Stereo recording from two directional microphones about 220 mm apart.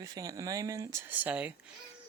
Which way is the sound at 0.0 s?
15° right (ahead or behind).